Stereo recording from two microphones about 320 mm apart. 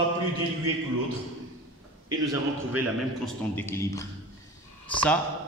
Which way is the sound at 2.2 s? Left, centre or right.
Centre.